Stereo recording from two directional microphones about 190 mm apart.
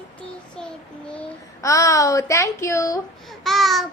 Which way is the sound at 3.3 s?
Centre (ahead or behind).